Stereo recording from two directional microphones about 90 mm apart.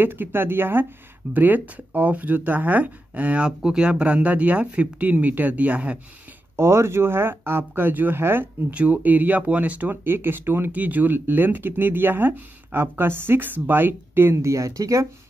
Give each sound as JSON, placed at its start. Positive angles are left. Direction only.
{"t": 0.0, "sound": "speech", "side_deg": -25}
{"t": 6.5, "sound": "speech", "side_deg": -30}